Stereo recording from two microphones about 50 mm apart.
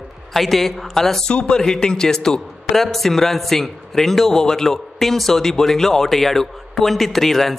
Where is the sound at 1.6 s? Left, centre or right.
Centre.